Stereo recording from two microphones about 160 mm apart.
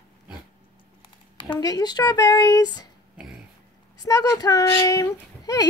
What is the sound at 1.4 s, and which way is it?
Speech, 25° left (ahead or behind).